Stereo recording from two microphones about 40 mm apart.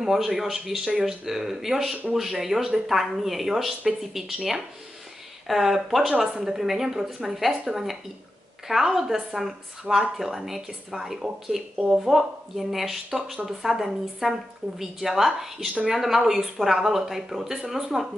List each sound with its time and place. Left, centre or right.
0.0 s a woman's voice: centre
6.1 s speech: centre